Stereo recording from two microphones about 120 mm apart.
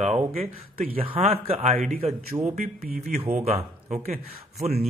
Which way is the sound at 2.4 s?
70° right (ahead or behind).